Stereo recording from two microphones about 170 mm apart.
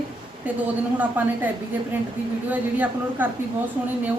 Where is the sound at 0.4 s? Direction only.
10° right (ahead or behind).